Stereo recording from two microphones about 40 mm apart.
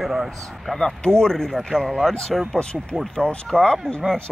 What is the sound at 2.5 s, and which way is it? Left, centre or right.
Speech, left.